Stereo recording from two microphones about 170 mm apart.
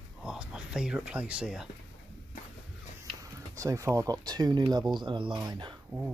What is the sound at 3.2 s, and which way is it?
Speech, 20° right (ahead or behind).